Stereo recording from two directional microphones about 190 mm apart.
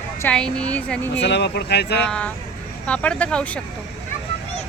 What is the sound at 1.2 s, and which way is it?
Speech, 65° left (ahead or behind).